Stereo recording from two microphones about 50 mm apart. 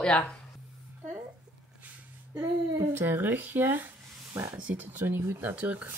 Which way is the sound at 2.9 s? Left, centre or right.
Right.